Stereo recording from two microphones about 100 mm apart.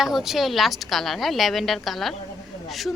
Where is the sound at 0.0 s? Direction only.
5° right (ahead or behind).